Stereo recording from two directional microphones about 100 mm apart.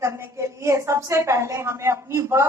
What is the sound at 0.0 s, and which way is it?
A woman's voice, 30° right (ahead or behind).